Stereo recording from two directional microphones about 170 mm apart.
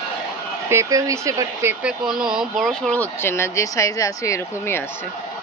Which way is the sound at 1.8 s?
5° right (ahead or behind).